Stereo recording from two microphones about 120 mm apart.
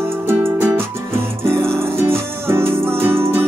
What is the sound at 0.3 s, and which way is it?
Music, 20° right (ahead or behind).